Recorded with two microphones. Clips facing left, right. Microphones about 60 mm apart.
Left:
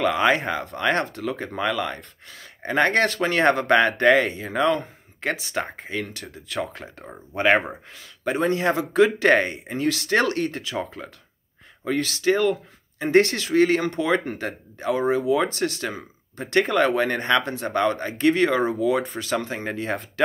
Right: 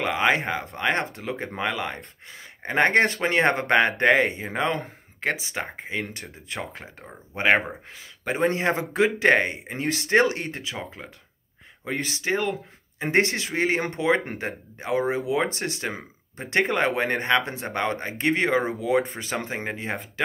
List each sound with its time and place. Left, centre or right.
0.0 s speech: centre
8.4 s speech: right
9.0 s speech: centre
11.8 s speech: centre
13.8 s speech: right
19.7 s speech: centre